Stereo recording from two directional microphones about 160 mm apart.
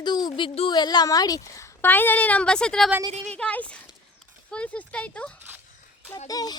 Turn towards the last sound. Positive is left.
turn(degrees=25)  # may be behind; listen again after turning